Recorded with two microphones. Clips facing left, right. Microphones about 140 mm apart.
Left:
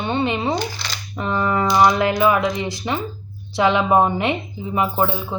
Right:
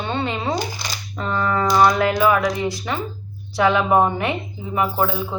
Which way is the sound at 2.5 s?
20° left (ahead or behind).